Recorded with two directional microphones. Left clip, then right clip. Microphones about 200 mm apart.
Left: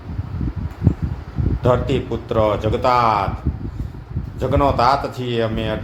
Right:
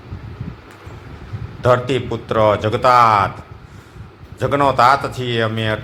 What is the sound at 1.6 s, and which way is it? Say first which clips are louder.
Speech: right 3 dB; 10° right (ahead or behind).